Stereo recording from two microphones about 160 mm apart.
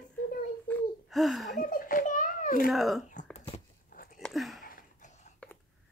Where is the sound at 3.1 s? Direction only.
50° left (ahead or behind).